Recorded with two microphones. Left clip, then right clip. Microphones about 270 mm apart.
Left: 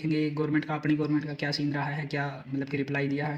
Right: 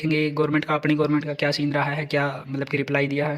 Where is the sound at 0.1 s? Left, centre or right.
Right.